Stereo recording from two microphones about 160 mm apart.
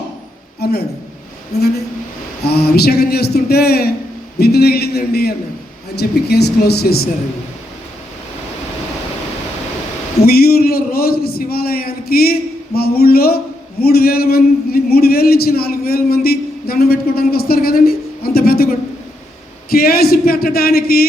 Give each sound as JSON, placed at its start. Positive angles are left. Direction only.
{"t": 0.6, "sound": "a man's voice", "side_deg": 85}
{"t": 10.2, "sound": "a man's voice", "side_deg": 70}
{"t": 19.7, "sound": "a man's voice", "side_deg": 70}